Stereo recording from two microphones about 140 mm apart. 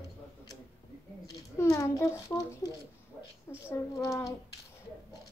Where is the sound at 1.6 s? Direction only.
20° left (ahead or behind).